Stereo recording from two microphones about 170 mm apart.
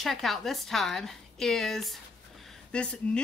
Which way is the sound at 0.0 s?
Centre (ahead or behind).